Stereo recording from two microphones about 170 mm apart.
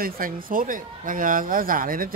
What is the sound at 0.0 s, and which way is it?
Speech, 55° right (ahead or behind).